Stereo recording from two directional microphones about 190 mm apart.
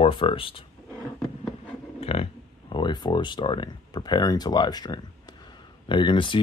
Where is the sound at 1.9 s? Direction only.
30° left (ahead or behind).